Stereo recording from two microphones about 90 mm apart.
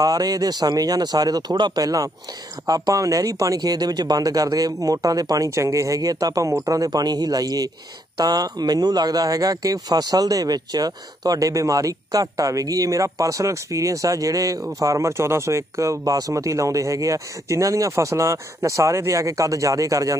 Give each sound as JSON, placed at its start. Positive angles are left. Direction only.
{"t": 0.0, "sound": "speech", "side_deg": -40}